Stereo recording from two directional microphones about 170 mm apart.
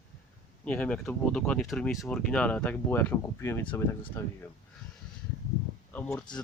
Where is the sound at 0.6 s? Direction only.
5° left (ahead or behind).